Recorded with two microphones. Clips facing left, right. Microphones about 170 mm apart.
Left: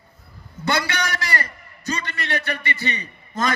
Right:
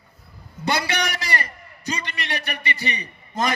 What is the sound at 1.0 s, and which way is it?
A man's voice, 15° right (ahead or behind).